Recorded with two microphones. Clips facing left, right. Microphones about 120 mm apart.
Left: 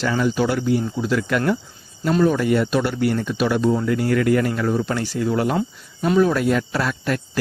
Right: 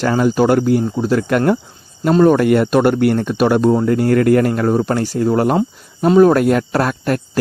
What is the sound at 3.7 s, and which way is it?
Speech, 40° right (ahead or behind).